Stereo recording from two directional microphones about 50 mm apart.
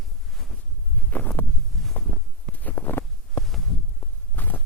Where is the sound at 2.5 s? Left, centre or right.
Left.